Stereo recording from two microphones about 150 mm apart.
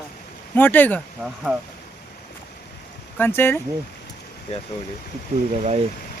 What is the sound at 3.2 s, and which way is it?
Speech, 15° left (ahead or behind).